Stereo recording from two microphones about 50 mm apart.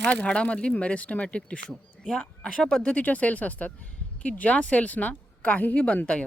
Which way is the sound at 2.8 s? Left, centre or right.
Left.